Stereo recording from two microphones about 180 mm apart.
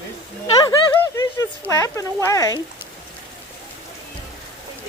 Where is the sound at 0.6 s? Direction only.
15° left (ahead or behind).